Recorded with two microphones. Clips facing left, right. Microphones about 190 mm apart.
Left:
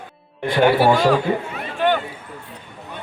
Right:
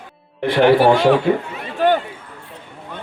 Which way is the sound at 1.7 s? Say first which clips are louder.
Right 3 dB; 40° right (ahead or behind).